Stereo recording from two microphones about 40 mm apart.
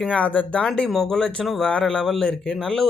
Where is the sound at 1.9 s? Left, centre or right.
Centre.